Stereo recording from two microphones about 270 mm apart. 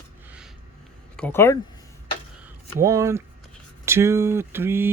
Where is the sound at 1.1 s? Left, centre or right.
Centre.